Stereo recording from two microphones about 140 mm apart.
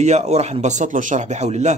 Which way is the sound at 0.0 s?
50° right (ahead or behind).